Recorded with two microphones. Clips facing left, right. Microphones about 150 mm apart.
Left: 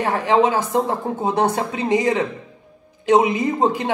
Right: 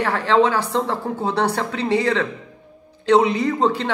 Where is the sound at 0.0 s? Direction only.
15° left (ahead or behind).